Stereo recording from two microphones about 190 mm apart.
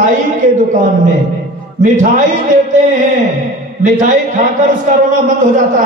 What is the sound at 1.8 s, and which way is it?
Speech, 40° right (ahead or behind).